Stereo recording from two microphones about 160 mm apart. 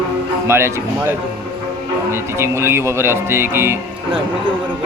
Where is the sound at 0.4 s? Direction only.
15° right (ahead or behind).